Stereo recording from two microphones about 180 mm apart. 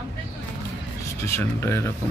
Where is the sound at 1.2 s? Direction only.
15° left (ahead or behind).